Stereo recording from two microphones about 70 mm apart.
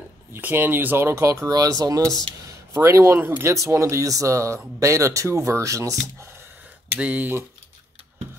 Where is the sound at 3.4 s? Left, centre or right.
Right.